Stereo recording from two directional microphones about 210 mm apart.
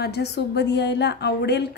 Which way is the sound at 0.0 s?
50° left (ahead or behind).